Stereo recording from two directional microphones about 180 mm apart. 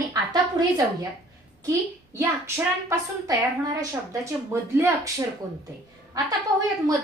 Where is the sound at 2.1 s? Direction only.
15° right (ahead or behind).